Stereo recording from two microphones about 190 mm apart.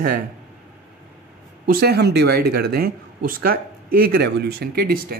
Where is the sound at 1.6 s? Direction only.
55° right (ahead or behind).